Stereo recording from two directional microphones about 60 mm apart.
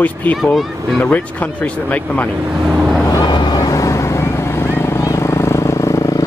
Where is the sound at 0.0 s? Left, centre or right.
Left.